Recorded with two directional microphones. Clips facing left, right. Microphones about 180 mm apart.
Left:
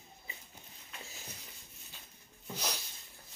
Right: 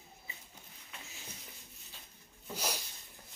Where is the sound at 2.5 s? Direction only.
10° right (ahead or behind).